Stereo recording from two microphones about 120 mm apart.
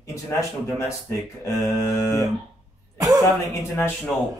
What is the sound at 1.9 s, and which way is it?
Speech, 25° left (ahead or behind).